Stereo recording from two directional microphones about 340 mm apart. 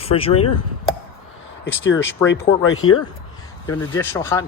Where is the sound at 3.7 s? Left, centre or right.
Centre.